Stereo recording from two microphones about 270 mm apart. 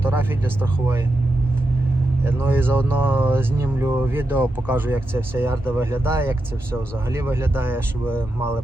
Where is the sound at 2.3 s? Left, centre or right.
Centre.